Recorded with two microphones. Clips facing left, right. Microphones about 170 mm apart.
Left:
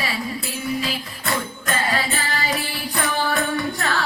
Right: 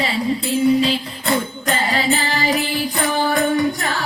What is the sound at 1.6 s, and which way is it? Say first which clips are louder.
Music: right 4 dB; 25° right (ahead or behind).